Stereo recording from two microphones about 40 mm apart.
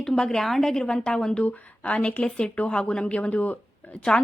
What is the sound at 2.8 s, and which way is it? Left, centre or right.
Speech, left.